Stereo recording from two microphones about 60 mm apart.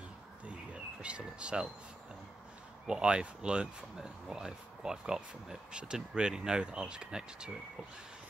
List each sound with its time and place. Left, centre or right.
1.0 s speech: centre
2.9 s speech: centre